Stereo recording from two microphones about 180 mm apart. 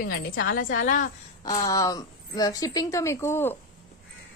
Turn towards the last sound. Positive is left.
turn(degrees=10)  # may be behind; listen again after turning